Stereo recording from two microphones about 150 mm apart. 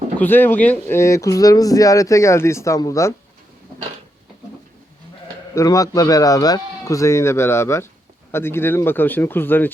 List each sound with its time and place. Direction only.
0.2 s speech: 15° left (ahead or behind)
5.5 s speech: 20° left (ahead or behind)